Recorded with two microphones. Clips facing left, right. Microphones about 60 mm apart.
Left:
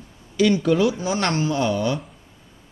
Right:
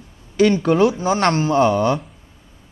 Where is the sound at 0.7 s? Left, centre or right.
Right.